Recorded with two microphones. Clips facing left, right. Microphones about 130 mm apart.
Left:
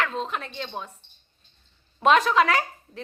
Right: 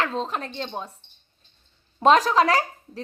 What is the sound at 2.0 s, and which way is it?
Speech, 35° right (ahead or behind).